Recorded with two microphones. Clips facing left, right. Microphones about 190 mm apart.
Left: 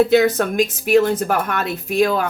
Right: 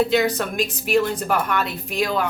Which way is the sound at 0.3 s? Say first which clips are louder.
Left 6 dB; 50° left (ahead or behind).